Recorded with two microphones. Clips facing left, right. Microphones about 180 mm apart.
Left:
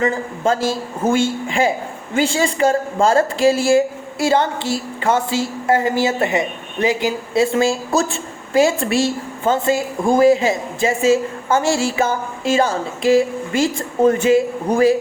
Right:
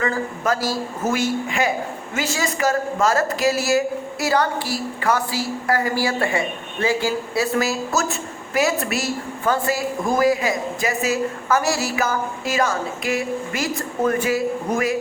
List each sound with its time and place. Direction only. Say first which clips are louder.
0.0 s a woman's voice: left 4 dB; 25° left (ahead or behind)